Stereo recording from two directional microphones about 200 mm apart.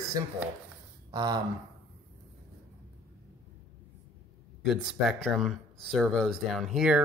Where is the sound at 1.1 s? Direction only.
20° right (ahead or behind).